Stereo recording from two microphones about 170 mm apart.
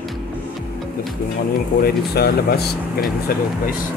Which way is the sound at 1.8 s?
65° left (ahead or behind).